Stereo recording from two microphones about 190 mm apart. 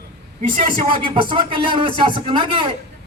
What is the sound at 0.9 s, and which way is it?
A man's voice, 25° right (ahead or behind).